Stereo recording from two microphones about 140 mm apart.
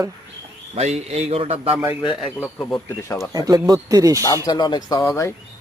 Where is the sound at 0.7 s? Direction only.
50° right (ahead or behind).